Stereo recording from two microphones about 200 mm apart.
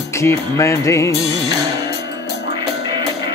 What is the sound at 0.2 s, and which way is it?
Music, 15° left (ahead or behind).